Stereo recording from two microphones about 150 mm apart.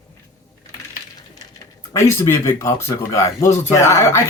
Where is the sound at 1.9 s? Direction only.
20° left (ahead or behind).